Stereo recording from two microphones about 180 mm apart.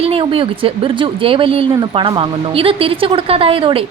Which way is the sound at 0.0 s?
30° right (ahead or behind).